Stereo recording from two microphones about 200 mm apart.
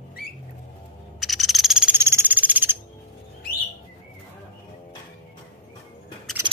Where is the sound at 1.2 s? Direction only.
Centre (ahead or behind).